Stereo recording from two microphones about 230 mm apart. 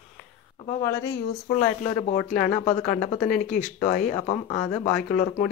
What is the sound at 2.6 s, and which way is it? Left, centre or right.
Speech, left.